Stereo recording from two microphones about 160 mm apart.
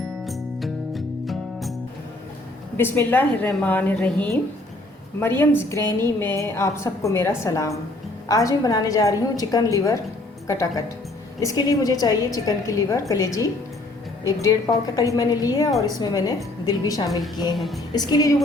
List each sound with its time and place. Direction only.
0.3 s music: centre (ahead or behind)
2.7 s a woman's voice: 15° left (ahead or behind)
17.5 s a woman's voice: centre (ahead or behind)
17.9 s a woman's voice: 25° left (ahead or behind)